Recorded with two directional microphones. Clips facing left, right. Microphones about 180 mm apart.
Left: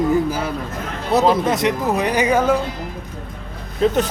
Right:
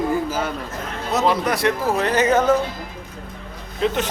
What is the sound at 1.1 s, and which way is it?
Speech, 45° left (ahead or behind).